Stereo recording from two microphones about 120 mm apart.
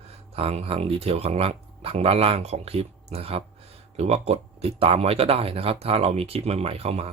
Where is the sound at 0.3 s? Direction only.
55° right (ahead or behind).